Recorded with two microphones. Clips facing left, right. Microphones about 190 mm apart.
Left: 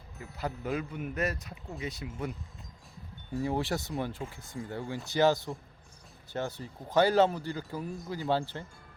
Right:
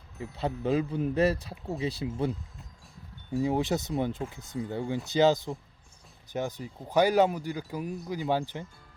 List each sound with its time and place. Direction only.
0.2 s speech: 25° right (ahead or behind)
3.3 s speech: 15° right (ahead or behind)